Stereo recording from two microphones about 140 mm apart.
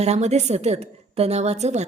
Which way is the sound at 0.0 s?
50° right (ahead or behind).